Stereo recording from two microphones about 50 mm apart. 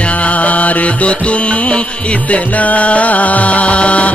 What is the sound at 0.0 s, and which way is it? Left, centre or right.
Music, left.